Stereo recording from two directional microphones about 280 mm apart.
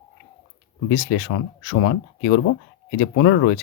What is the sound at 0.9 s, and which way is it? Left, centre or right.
Speech, left.